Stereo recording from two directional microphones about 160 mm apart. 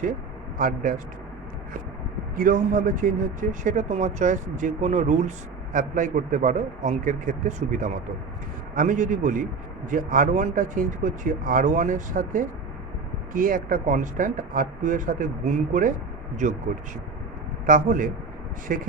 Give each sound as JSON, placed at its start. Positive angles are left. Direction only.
{"t": 0.6, "sound": "speech", "side_deg": -55}
{"t": 2.3, "sound": "a man's voice", "side_deg": -55}
{"t": 17.7, "sound": "speech", "side_deg": -55}